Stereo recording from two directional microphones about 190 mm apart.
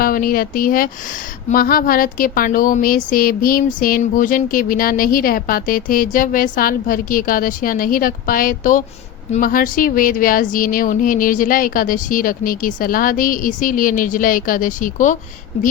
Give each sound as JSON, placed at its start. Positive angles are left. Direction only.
{"t": 0.0, "sound": "speech", "side_deg": 50}